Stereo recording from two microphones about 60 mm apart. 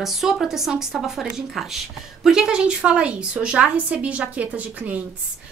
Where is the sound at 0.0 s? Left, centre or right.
Centre.